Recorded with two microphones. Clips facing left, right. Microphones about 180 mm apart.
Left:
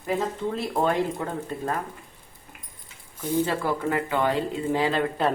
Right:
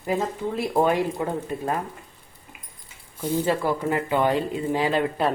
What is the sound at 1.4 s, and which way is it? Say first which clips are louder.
Speech: right 2 dB; 15° right (ahead or behind).